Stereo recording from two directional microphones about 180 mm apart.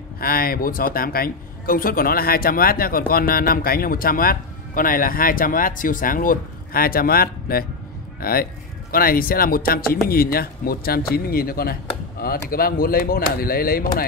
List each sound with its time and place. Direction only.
0.2 s a man's voice: 55° left (ahead or behind)